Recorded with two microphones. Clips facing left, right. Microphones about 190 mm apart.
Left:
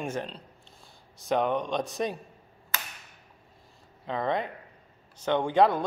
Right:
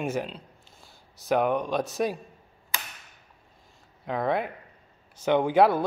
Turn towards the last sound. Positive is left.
turn(degrees=-5)  # may be behind; listen again after turning